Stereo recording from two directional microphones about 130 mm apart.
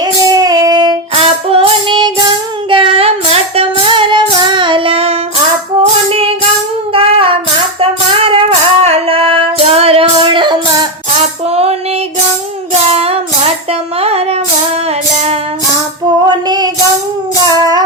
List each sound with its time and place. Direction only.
0.0 s female singing: 30° right (ahead or behind)
1.1 s music: 45° right (ahead or behind)
6.9 s female singing: 45° right (ahead or behind)
7.8 s music: 45° right (ahead or behind)
11.1 s music: 55° right (ahead or behind)
12.9 s music: 50° right (ahead or behind)
14.0 s female singing: 50° right (ahead or behind)
15.1 s music: 55° right (ahead or behind)
16.2 s female singing: 30° right (ahead or behind)
17.5 s music: 30° right (ahead or behind)